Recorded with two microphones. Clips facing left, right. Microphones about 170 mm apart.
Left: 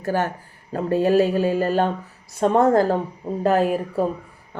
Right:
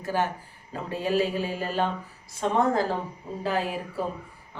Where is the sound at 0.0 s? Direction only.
45° left (ahead or behind).